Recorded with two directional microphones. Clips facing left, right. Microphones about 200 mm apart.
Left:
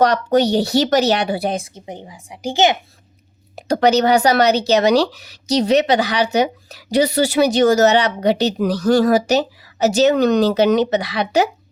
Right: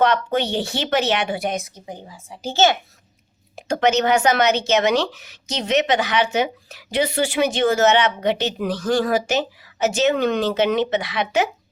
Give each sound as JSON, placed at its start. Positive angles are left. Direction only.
{"t": 0.0, "sound": "speech", "side_deg": 40}
{"t": 3.5, "sound": "speech", "side_deg": 35}